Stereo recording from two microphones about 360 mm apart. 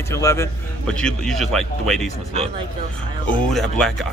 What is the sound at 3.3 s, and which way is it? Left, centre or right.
Speech, centre.